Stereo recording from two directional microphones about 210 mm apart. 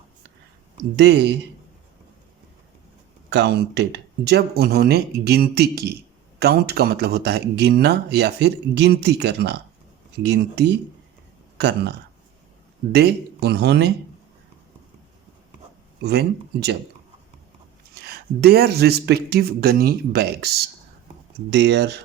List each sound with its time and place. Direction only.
0.9 s speech: 50° right (ahead or behind)
3.2 s speech: 55° right (ahead or behind)
16.0 s speech: 50° right (ahead or behind)
17.9 s speech: 50° right (ahead or behind)